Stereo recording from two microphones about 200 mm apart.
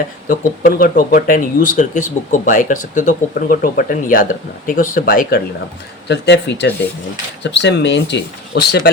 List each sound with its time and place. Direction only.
0.3 s speech: 45° left (ahead or behind)
6.1 s speech: 60° left (ahead or behind)